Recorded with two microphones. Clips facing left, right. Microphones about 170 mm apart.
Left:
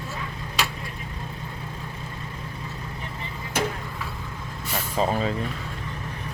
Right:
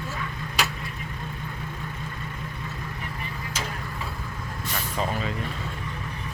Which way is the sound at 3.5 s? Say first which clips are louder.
Left 9 dB; 60° left (ahead or behind).